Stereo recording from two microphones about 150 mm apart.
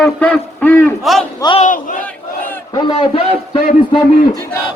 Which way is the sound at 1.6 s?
55° left (ahead or behind).